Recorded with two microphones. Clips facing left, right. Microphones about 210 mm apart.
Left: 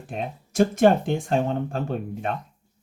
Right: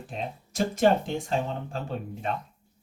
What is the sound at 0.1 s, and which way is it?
Speech, 55° left (ahead or behind).